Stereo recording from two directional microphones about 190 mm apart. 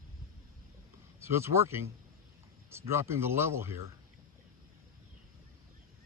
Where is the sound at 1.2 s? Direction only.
15° right (ahead or behind).